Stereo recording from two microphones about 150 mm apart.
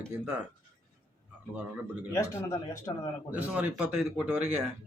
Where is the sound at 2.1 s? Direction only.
20° left (ahead or behind).